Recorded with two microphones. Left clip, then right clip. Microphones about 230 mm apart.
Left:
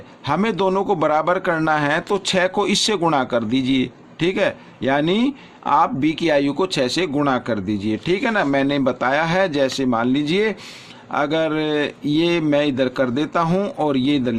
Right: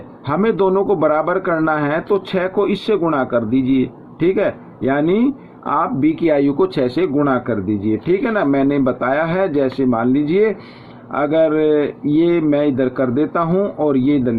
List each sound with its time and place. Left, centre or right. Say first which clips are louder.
0.3 s a man's voice: right 3 dB; left